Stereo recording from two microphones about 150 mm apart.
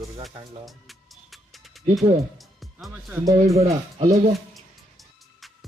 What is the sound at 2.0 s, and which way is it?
Speech, 35° right (ahead or behind).